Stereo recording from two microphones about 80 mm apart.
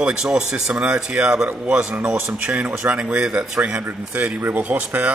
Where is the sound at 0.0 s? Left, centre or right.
Centre.